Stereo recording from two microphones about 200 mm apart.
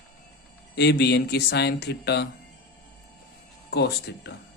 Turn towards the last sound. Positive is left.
turn(degrees=55)  # may be behind; listen again after turning